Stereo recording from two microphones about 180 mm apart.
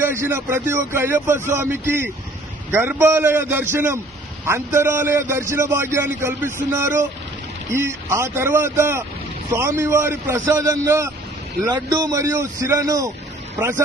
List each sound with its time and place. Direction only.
0.0 s a man's voice: 15° right (ahead or behind)